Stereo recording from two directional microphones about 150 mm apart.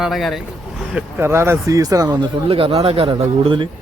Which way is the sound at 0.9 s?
15° right (ahead or behind).